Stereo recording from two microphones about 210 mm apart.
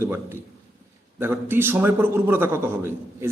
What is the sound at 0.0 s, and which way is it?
A man's voice, 10° right (ahead or behind).